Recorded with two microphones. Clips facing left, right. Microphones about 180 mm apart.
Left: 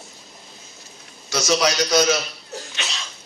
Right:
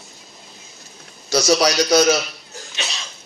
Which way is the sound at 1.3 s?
35° right (ahead or behind).